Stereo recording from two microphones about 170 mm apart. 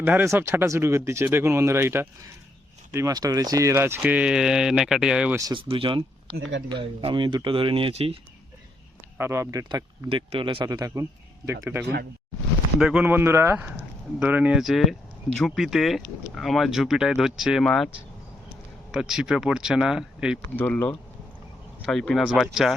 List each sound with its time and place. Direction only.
0.0 s speech: 10° right (ahead or behind)
5.4 s speech: 20° right (ahead or behind)
9.1 s speech: 15° right (ahead or behind); by 17.8 s centre (ahead or behind)
18.9 s speech: 5° right (ahead or behind)
20.6 s speech: 10° left (ahead or behind)